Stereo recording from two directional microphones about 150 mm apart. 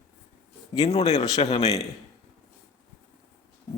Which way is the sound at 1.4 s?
40° left (ahead or behind).